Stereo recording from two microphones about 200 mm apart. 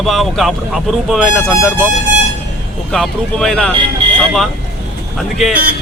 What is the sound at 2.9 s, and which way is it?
Speech, centre (ahead or behind).